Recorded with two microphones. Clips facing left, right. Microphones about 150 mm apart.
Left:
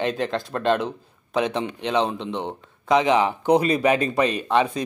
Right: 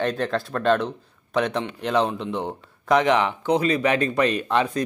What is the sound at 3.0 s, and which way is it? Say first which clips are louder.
Speech: left 1 dB; 25° left (ahead or behind).